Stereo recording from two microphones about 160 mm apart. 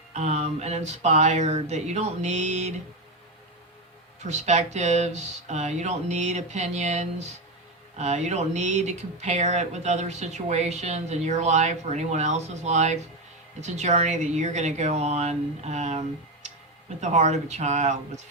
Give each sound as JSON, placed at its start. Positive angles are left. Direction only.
{"t": 0.1, "sound": "speech", "side_deg": -45}
{"t": 4.2, "sound": "speech", "side_deg": -45}